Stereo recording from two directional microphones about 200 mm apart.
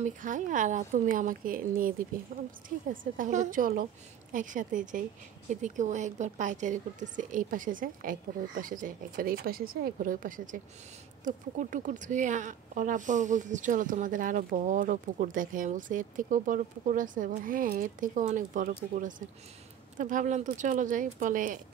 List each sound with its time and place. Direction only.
0.0 s a woman's voice: 40° right (ahead or behind)